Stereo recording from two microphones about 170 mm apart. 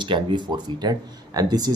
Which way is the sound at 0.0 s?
30° right (ahead or behind).